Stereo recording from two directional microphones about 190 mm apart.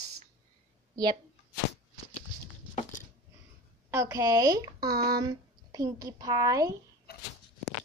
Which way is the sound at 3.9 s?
15° right (ahead or behind).